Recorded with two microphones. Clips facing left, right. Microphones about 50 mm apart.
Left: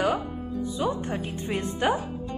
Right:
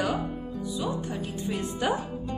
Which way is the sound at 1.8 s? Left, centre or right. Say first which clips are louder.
Left 3 dB; left.